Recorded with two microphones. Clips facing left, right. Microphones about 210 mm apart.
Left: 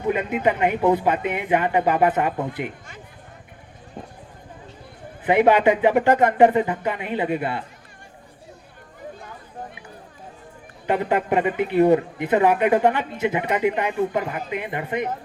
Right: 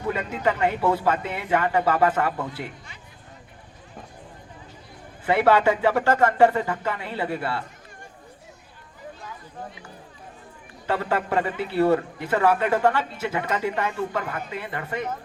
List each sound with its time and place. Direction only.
0.0 s speech: 20° left (ahead or behind)
5.2 s speech: 20° left (ahead or behind)
10.8 s speech: 20° left (ahead or behind)